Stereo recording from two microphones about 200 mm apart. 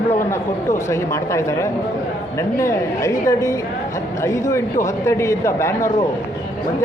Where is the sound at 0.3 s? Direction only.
15° left (ahead or behind).